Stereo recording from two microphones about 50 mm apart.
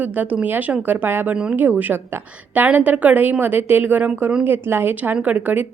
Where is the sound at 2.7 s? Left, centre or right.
Right.